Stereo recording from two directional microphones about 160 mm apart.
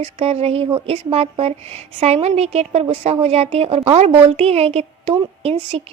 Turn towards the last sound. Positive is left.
turn(degrees=-40)  # may be behind; listen again after turning